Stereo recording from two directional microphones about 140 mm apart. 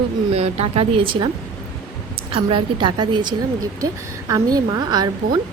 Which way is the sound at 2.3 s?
35° right (ahead or behind).